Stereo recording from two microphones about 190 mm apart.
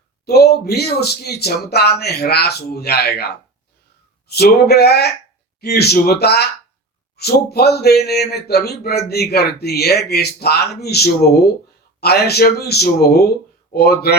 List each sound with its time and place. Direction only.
0.3 s a man's voice: 55° left (ahead or behind)